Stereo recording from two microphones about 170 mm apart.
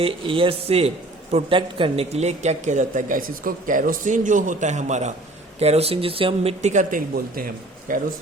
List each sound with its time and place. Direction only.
0.0 s a man's voice: 30° right (ahead or behind); by 8.0 s 55° right (ahead or behind)